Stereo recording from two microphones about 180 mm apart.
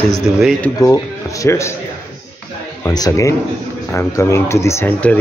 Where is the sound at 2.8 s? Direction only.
20° left (ahead or behind).